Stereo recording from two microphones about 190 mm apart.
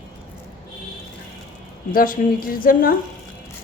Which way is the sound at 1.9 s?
50° left (ahead or behind).